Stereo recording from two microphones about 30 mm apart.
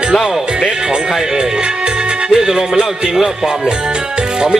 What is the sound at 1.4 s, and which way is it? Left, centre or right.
Music, right.